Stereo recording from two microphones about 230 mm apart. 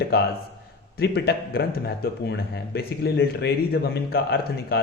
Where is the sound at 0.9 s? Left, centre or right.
Left.